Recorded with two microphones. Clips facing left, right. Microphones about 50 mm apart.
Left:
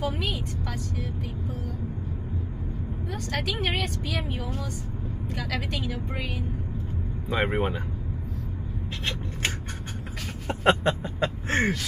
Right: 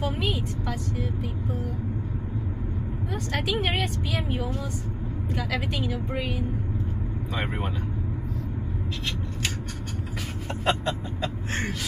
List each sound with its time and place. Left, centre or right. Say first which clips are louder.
0.0 s vehicle: right 1 dB; centre
3.3 s a woman's voice: right 2 dB; centre
7.2 s speech: left 6 dB; left
10.5 s a sound: left 4 dB; left